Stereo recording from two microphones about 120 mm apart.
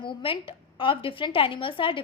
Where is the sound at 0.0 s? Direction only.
45° left (ahead or behind).